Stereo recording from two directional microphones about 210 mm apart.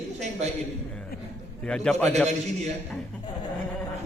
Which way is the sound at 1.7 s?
5° left (ahead or behind).